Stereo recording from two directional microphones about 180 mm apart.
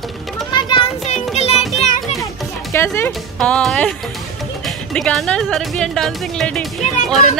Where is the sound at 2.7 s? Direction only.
15° left (ahead or behind).